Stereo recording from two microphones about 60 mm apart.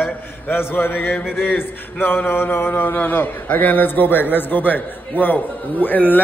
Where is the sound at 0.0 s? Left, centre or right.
Left.